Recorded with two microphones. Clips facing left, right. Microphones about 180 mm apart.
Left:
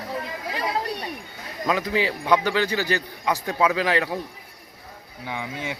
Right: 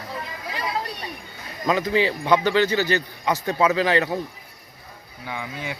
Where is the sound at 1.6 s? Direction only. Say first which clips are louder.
Right 2 dB; 5° left (ahead or behind).